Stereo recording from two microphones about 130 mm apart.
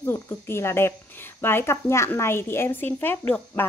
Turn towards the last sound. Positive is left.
turn(degrees=15)  # may be behind; listen again after turning